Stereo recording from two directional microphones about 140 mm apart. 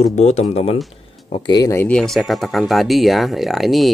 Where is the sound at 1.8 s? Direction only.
5° left (ahead or behind).